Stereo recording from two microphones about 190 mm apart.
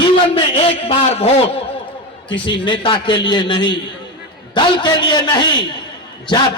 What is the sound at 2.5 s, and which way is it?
A man's voice, 25° left (ahead or behind).